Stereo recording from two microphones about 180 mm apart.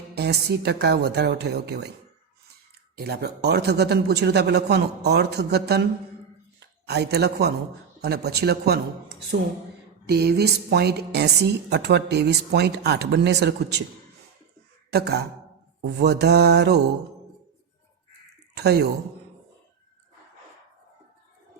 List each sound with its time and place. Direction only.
0.1 s a woman's voice: 65° right (ahead or behind)
2.9 s a woman's voice: 60° right (ahead or behind)
10.1 s a woman's voice: 65° right (ahead or behind)
14.9 s a woman's voice: 65° right (ahead or behind)
15.8 s mantra: 65° right (ahead or behind)
18.5 s a woman's voice: 65° right (ahead or behind)